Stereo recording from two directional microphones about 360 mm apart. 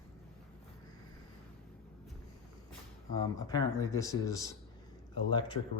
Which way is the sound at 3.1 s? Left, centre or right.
Centre.